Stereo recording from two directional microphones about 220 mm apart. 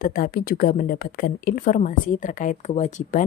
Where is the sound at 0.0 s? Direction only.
40° left (ahead or behind).